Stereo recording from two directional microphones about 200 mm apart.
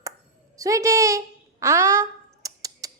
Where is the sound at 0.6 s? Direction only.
15° right (ahead or behind).